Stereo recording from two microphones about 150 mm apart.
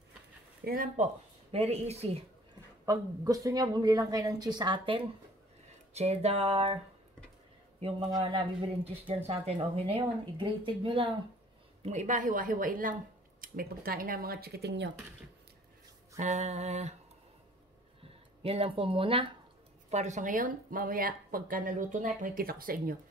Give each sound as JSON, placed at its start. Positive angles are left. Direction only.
{"t": 0.6, "sound": "speech", "side_deg": -90}
{"t": 0.9, "sound": "speech", "side_deg": -45}
{"t": 2.8, "sound": "a woman's voice", "side_deg": -25}
{"t": 5.9, "sound": "a sound", "side_deg": -45}
{"t": 8.2, "sound": "speech", "side_deg": -40}
{"t": 11.8, "sound": "speech", "side_deg": -50}
{"t": 16.2, "sound": "a sound", "side_deg": -50}
{"t": 18.4, "sound": "speech", "side_deg": -40}
{"t": 19.9, "sound": "speech", "side_deg": -50}